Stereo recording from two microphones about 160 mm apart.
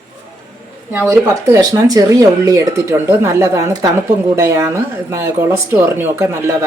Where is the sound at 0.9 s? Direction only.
15° right (ahead or behind).